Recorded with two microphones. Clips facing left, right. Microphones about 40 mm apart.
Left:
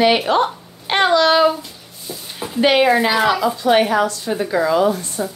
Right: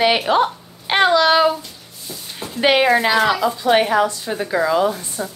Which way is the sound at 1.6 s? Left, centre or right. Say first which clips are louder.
Left 1 dB; centre.